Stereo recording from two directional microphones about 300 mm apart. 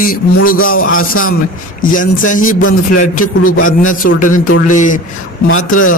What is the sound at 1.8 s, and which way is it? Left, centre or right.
A man's voice, left.